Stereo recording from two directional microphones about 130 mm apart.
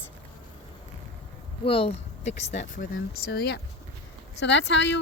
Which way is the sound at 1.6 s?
50° left (ahead or behind).